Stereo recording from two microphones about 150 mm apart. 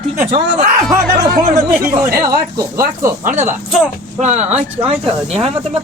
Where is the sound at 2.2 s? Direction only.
25° right (ahead or behind).